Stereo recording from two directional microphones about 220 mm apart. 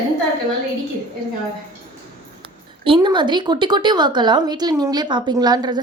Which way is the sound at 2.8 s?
20° right (ahead or behind).